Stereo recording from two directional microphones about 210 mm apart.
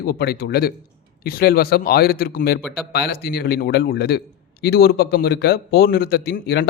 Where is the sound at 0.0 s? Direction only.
50° left (ahead or behind).